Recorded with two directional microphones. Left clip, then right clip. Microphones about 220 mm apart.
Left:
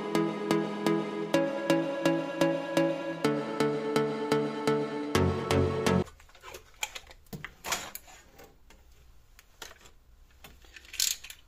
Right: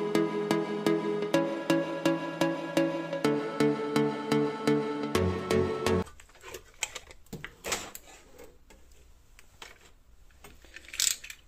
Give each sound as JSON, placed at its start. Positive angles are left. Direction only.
{"t": 0.1, "sound": "music", "side_deg": 0}
{"t": 6.4, "sound": "typing", "side_deg": -30}